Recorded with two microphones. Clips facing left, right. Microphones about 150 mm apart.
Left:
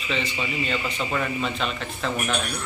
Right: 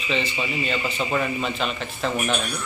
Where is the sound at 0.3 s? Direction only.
Centre (ahead or behind).